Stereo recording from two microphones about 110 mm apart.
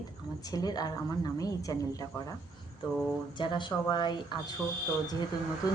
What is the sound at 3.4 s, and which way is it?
Speech, 45° left (ahead or behind).